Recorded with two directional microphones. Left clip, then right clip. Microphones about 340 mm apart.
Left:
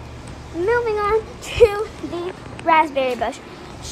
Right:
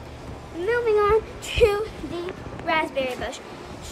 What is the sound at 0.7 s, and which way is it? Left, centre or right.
Speech, centre.